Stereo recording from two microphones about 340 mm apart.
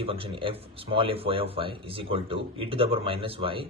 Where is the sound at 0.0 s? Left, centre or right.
Centre.